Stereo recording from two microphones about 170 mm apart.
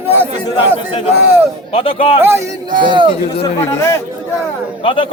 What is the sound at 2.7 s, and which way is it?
Speech, 30° right (ahead or behind).